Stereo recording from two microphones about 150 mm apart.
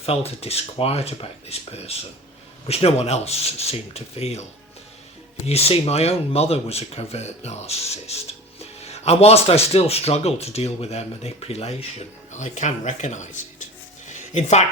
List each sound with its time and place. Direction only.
0.0 s speech: 40° left (ahead or behind)
5.5 s speech: 40° left (ahead or behind)
14.1 s music: 55° left (ahead or behind)